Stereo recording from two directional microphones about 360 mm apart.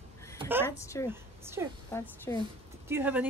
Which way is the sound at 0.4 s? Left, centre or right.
Centre.